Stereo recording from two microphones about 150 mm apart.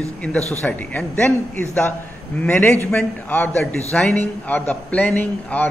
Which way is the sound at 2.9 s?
15° left (ahead or behind).